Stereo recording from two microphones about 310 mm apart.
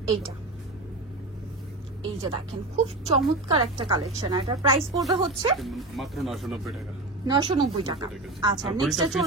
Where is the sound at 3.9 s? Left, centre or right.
Centre.